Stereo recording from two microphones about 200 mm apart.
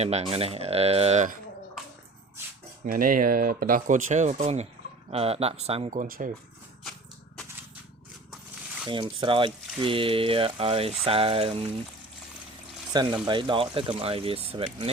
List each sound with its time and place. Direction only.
0.0 s speech: 30° right (ahead or behind)
2.8 s speech: 45° right (ahead or behind)
8.9 s speech: 25° right (ahead or behind)
12.9 s speech: 20° right (ahead or behind)